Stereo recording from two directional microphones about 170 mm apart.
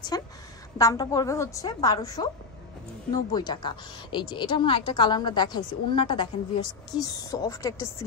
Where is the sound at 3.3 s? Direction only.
25° left (ahead or behind).